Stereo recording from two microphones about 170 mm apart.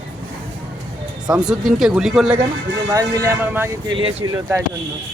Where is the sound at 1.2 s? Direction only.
5° right (ahead or behind).